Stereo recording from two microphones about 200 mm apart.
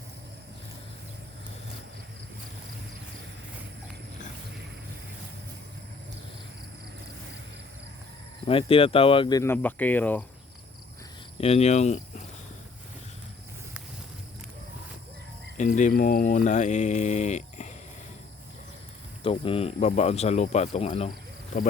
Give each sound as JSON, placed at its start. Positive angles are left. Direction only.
{"t": 8.4, "sound": "speech", "side_deg": 30}
{"t": 9.4, "sound": "speech", "side_deg": 10}
{"t": 11.3, "sound": "cricket", "side_deg": 30}
{"t": 15.5, "sound": "speech", "side_deg": 40}
{"t": 19.2, "sound": "speech", "side_deg": 25}